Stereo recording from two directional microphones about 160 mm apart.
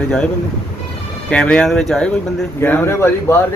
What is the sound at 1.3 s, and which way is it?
Speech, 5° left (ahead or behind).